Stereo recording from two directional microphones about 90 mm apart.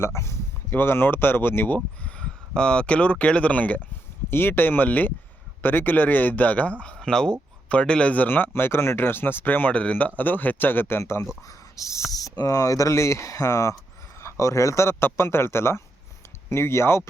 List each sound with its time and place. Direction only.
0.0 s speech: 30° left (ahead or behind)